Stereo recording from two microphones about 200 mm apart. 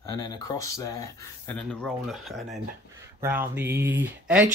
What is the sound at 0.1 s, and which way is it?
Speech, 20° left (ahead or behind).